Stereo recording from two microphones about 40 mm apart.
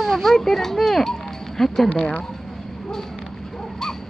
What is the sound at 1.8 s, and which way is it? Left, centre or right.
Speech, left.